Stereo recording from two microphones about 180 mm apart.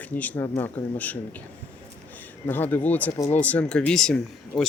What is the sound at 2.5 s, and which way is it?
Speech, 10° left (ahead or behind).